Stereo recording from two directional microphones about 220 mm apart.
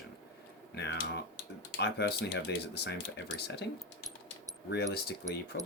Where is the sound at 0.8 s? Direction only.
50° left (ahead or behind).